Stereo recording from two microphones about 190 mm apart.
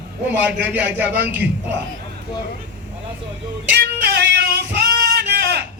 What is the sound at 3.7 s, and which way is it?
Music, 60° right (ahead or behind).